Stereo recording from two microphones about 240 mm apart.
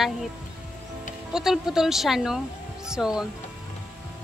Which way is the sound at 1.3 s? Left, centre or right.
Centre.